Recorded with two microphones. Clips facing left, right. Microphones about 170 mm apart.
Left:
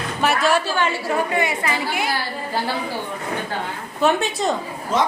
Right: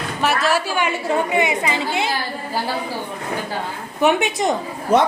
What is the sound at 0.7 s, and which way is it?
A woman's voice, 20° right (ahead or behind).